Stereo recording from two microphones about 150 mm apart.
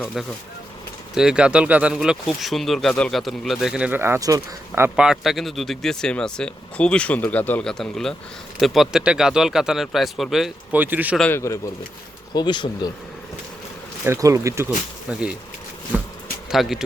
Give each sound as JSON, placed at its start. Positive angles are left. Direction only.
{"t": 1.1, "sound": "speech", "side_deg": -5}
{"t": 4.9, "sound": "speech", "side_deg": -5}
{"t": 11.2, "sound": "speech", "side_deg": 15}
{"t": 12.3, "sound": "speech", "side_deg": 30}
{"t": 14.0, "sound": "speech", "side_deg": -20}
{"t": 15.1, "sound": "speech", "side_deg": -5}
{"t": 15.9, "sound": "a sound", "side_deg": -10}
{"t": 16.5, "sound": "speech", "side_deg": 0}